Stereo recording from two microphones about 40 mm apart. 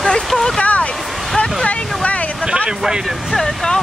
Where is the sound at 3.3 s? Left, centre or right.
Centre.